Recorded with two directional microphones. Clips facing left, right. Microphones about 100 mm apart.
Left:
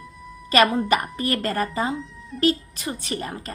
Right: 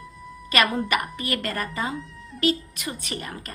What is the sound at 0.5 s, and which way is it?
A woman's voice, 35° left (ahead or behind).